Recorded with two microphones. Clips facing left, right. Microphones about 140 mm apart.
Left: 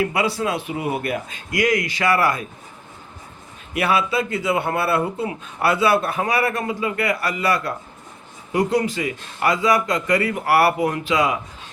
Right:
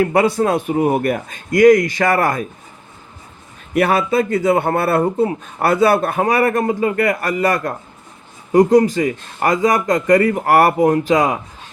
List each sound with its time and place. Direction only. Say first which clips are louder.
0.0 s a man's voice: right 7 dB; 50° right (ahead or behind)
3.8 s a man's voice: right 5 dB; 50° right (ahead or behind)